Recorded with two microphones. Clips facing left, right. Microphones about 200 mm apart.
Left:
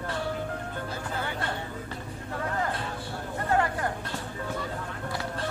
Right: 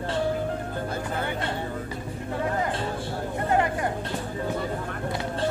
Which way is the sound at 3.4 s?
20° right (ahead or behind).